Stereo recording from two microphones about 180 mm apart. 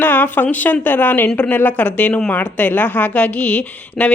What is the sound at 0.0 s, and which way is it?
A woman's voice, 10° left (ahead or behind).